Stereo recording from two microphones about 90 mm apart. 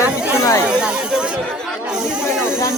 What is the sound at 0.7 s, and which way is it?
Chatter, 10° right (ahead or behind).